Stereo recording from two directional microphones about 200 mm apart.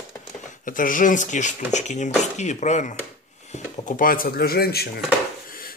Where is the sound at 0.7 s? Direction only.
40° left (ahead or behind).